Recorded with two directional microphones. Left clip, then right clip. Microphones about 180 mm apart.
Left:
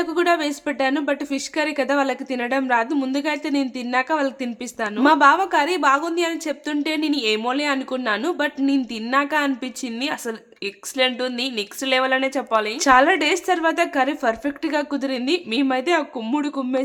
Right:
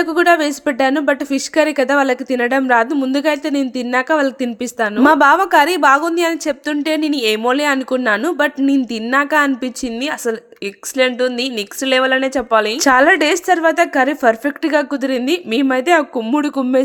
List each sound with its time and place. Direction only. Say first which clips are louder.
0.0 s a woman's voice: right 7 dB; 30° right (ahead or behind)